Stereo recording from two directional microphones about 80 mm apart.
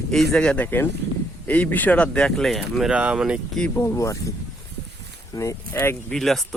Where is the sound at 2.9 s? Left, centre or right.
Centre.